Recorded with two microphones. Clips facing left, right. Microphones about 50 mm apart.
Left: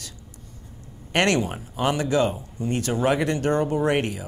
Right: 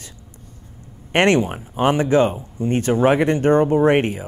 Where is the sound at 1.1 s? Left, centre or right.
Right.